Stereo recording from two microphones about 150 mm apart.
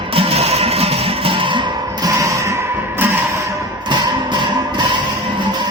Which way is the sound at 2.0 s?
20° right (ahead or behind).